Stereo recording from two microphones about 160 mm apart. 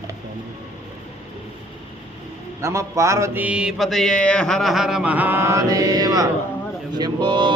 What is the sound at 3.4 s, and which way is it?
Mantra, 5° right (ahead or behind).